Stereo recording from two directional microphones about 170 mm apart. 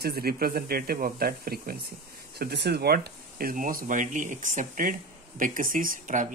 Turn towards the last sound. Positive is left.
turn(degrees=-50)  # may be behind; listen again after turning